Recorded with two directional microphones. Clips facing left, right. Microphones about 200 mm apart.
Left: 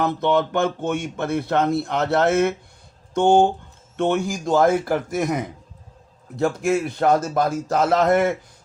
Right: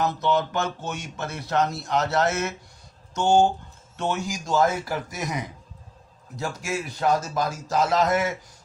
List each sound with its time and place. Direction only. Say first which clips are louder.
0.0 s speech: left 4 dB; 55° left (ahead or behind)